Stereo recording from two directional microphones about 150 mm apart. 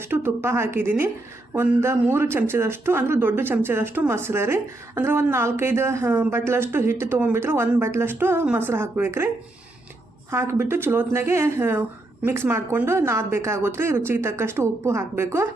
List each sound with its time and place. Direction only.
0.0 s speech: 15° right (ahead or behind)
10.3 s speech: 15° right (ahead or behind)